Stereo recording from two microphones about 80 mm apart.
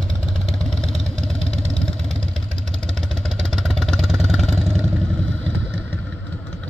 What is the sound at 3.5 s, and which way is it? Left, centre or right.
Vehicle, centre.